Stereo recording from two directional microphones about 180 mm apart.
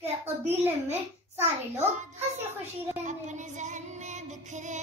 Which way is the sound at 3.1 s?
40° right (ahead or behind).